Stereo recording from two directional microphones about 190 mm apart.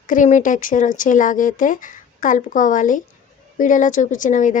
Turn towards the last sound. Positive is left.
turn(degrees=40)  # may be behind; listen again after turning